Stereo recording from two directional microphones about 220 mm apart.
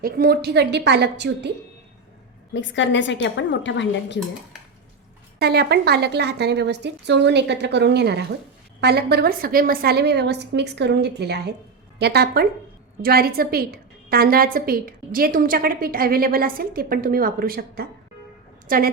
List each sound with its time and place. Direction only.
0.0 s a woman's voice: 45° right (ahead or behind)
2.5 s a woman's voice: 55° left (ahead or behind)
5.4 s a woman's voice: 50° right (ahead or behind)